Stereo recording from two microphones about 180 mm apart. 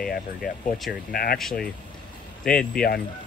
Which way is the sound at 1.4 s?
Centre (ahead or behind).